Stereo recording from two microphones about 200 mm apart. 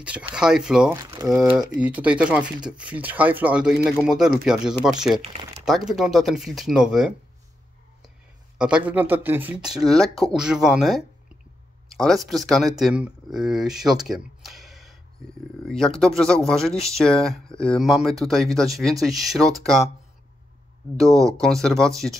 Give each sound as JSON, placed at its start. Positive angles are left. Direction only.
{"t": 0.0, "sound": "speech", "side_deg": -5}
{"t": 0.9, "sound": "speech", "side_deg": -15}
{"t": 1.4, "sound": "speech", "side_deg": -5}
{"t": 5.1, "sound": "speech", "side_deg": -30}
{"t": 5.7, "sound": "speech", "side_deg": 0}
{"t": 8.5, "sound": "speech", "side_deg": -5}
{"t": 14.0, "sound": "a sound", "side_deg": 0}
{"t": 15.6, "sound": "speech", "side_deg": 0}
{"t": 21.1, "sound": "speech", "side_deg": -15}
{"t": 21.4, "sound": "speech", "side_deg": 0}